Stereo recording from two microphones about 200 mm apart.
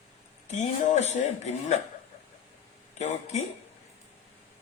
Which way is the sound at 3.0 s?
35° left (ahead or behind).